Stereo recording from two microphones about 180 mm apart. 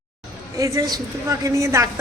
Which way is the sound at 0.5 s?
20° right (ahead or behind).